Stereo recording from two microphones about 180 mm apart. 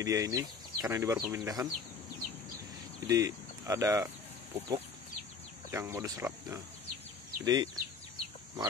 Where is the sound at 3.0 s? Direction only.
20° right (ahead or behind).